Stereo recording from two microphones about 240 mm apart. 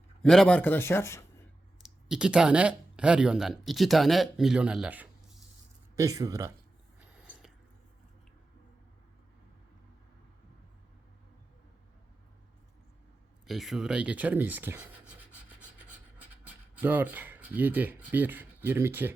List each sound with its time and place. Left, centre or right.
0.2 s speech: centre
1.8 s speech: centre
13.5 s speech: centre
16.8 s speech: centre